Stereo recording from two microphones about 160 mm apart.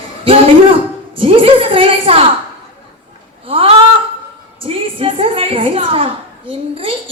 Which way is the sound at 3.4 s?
35° right (ahead or behind).